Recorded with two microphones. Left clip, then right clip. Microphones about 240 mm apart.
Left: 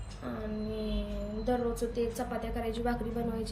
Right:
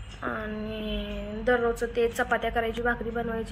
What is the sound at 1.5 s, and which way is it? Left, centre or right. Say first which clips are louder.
Speech: right 7 dB; right.